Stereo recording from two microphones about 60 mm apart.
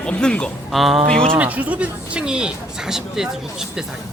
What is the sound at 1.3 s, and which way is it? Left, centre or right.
Speech, right.